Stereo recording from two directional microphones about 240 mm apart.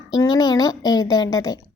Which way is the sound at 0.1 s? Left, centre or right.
Centre.